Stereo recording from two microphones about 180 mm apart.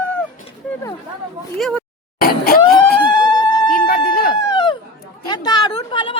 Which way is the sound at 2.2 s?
55° left (ahead or behind).